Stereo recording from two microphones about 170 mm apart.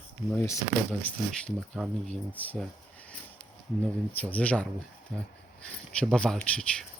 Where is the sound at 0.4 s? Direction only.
15° left (ahead or behind).